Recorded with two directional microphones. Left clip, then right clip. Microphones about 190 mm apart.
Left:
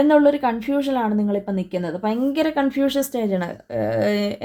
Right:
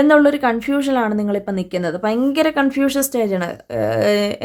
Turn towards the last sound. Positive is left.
turn(degrees=-20)  # may be behind; listen again after turning